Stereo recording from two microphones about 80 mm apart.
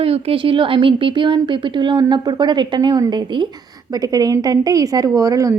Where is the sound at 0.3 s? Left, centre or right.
Right.